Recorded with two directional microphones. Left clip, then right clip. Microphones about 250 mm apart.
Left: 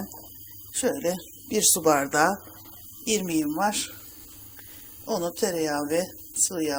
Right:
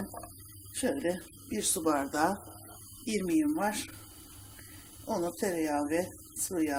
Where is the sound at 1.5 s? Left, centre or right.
Centre.